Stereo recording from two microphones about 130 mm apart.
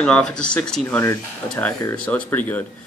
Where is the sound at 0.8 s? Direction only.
20° left (ahead or behind).